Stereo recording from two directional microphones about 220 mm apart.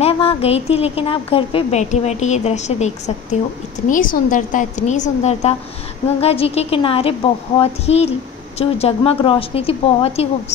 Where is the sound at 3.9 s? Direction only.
40° left (ahead or behind).